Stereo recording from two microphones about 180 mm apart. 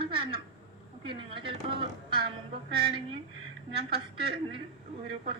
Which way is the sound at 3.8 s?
30° right (ahead or behind).